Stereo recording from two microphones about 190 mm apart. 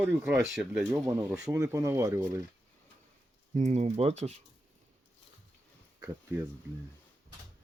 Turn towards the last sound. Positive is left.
turn(degrees=-15)  # may be behind; listen again after turning